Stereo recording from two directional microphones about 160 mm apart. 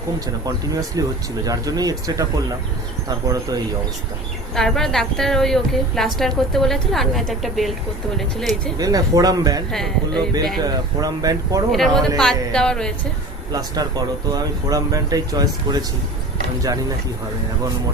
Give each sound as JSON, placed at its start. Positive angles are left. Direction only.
{"t": 0.4, "sound": "speech", "side_deg": -20}
{"t": 4.5, "sound": "a woman's voice", "side_deg": 5}
{"t": 8.8, "sound": "speech", "side_deg": -25}
{"t": 11.7, "sound": "a woman's voice", "side_deg": 0}
{"t": 13.5, "sound": "speech", "side_deg": -25}